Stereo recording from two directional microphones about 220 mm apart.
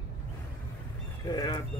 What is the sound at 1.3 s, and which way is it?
Speech, 15° left (ahead or behind).